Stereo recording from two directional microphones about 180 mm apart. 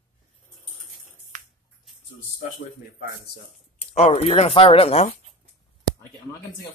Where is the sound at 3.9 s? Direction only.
35° left (ahead or behind).